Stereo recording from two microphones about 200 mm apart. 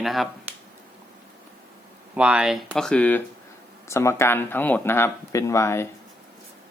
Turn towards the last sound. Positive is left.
turn(degrees=15)  # may be behind; listen again after turning